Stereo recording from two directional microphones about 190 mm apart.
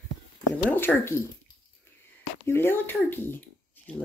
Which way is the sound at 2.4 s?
10° left (ahead or behind).